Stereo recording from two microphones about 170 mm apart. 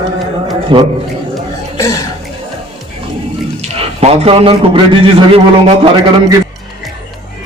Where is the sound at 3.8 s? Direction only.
35° right (ahead or behind).